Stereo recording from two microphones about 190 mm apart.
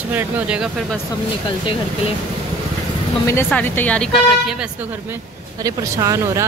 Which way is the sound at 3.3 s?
10° left (ahead or behind).